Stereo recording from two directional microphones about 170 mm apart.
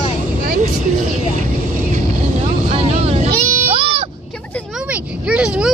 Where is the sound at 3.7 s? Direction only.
35° right (ahead or behind).